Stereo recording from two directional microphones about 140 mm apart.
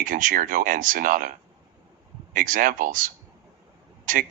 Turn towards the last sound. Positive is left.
turn(degrees=-75)  # may be behind; listen again after turning